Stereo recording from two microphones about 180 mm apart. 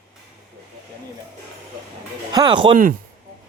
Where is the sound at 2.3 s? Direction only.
25° right (ahead or behind).